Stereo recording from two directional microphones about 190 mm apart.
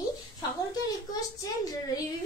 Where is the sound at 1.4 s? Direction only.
20° left (ahead or behind).